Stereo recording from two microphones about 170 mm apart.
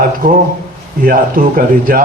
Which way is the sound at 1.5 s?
50° right (ahead or behind).